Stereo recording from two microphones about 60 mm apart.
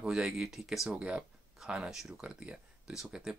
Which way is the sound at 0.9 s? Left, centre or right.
Centre.